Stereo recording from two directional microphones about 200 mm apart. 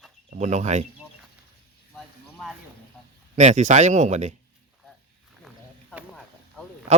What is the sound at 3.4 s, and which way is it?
Speech, 35° right (ahead or behind).